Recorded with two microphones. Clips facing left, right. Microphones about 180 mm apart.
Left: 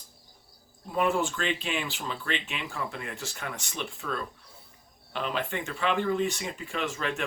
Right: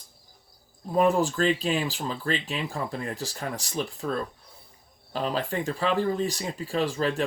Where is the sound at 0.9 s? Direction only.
35° right (ahead or behind).